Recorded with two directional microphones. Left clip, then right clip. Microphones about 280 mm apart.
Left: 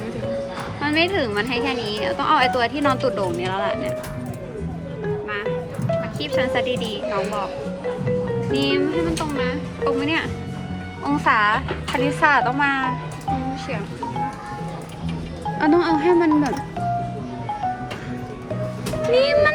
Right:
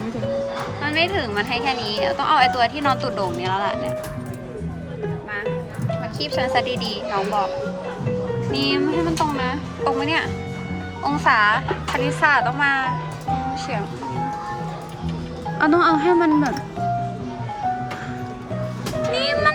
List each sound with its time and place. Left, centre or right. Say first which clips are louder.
0.8 s a woman's voice: left 2 dB; centre
5.3 s music: left 1 dB; centre
8.5 s a woman's voice: even; centre
15.6 s speech: right 1 dB; centre
19.1 s music: left 4 dB; centre